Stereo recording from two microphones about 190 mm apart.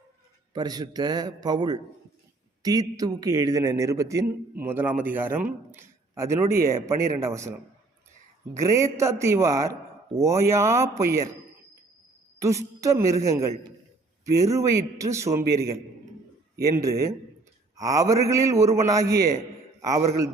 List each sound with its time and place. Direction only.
0.5 s a man's voice: 20° right (ahead or behind)
8.5 s a man's voice: 15° right (ahead or behind)
12.4 s a man's voice: 15° right (ahead or behind)